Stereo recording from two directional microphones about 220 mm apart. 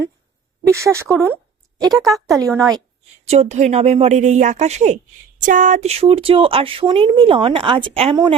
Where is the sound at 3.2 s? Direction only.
30° right (ahead or behind).